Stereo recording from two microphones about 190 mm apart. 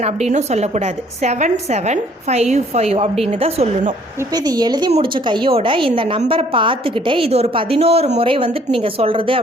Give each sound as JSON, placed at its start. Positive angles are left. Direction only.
{"t": 0.0, "sound": "a woman's voice", "side_deg": -35}
{"t": 4.4, "sound": "a woman's voice", "side_deg": -20}